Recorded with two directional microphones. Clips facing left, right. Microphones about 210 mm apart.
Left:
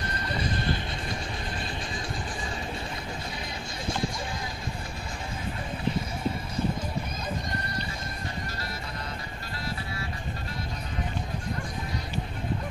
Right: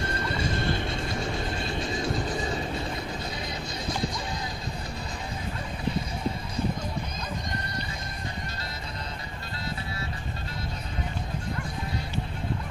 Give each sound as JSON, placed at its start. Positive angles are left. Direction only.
{"t": 0.0, "sound": "music", "side_deg": -25}